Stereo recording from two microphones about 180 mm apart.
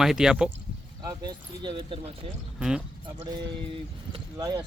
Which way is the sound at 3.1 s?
25° right (ahead or behind).